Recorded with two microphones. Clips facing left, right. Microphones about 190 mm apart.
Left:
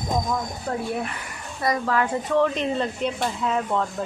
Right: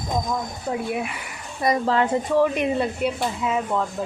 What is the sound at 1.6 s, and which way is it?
Speech, 25° right (ahead or behind).